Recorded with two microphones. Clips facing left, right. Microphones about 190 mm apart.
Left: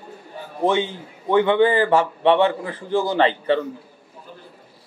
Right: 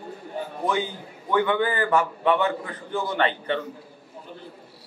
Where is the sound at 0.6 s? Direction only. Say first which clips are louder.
Left 7 dB; 25° left (ahead or behind).